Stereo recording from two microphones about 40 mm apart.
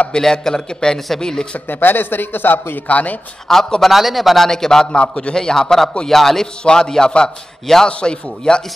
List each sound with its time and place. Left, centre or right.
0.1 s a man's voice: centre
1.2 s a sound: centre
1.7 s a man's voice: left
2.9 s speech: left
3.4 s a man's voice: centre
3.9 s speech: centre
4.5 s a man's voice: centre
6.6 s a sound: centre
7.6 s a man's voice: centre
8.0 s a sound: left